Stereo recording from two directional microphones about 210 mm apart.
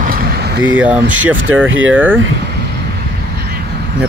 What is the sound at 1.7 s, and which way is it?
Speech, 70° right (ahead or behind).